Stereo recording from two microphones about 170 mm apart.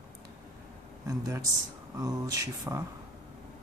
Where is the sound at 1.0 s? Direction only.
20° right (ahead or behind).